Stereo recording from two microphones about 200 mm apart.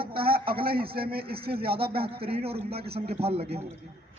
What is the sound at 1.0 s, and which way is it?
Speech, 50° right (ahead or behind).